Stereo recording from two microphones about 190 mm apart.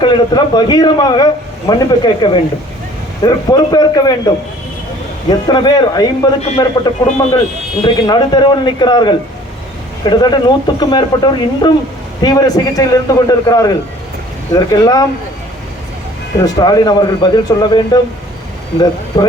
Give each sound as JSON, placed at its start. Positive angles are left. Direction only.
{"t": 0.0, "sound": "speech", "side_deg": 25}
{"t": 5.3, "sound": "speech", "side_deg": 20}
{"t": 16.4, "sound": "speech", "side_deg": 20}